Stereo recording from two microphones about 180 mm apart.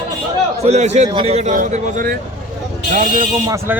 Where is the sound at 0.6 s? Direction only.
40° right (ahead or behind).